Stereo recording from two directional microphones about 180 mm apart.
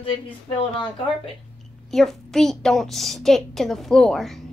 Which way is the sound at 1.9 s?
Centre (ahead or behind).